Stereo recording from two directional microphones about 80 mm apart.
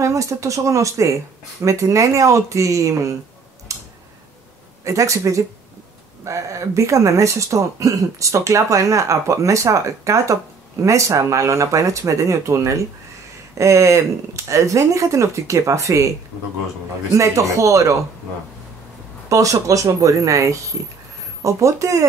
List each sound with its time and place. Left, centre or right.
0.0 s speech: right
3.7 s tick-tock: right
4.8 s speech: right
19.2 s speech: right